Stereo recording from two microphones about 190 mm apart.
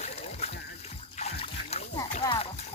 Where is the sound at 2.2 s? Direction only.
25° left (ahead or behind).